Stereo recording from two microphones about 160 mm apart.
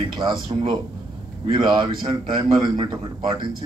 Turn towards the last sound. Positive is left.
turn(degrees=-30)  # may be behind; listen again after turning